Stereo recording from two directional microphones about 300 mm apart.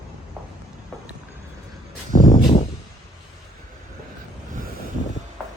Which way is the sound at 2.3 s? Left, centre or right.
Centre.